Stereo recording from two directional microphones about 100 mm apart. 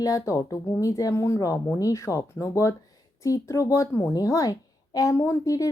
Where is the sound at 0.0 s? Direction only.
35° left (ahead or behind).